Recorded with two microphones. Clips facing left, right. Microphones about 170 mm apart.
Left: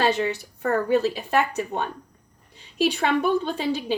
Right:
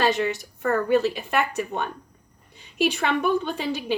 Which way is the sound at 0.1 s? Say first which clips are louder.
Even; 35° left (ahead or behind).